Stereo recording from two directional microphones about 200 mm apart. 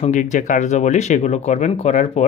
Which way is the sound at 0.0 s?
40° left (ahead or behind).